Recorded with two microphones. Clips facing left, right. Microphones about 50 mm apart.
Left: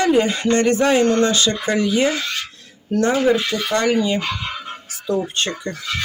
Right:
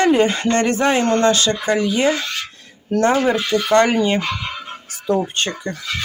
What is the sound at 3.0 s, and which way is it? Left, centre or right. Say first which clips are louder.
Speech: even; right.